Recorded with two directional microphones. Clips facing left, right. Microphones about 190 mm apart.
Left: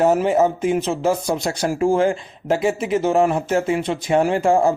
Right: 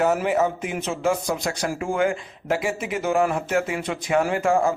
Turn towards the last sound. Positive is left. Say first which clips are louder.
# left 4 dB
turn(degrees=30)  # may be behind; listen again after turning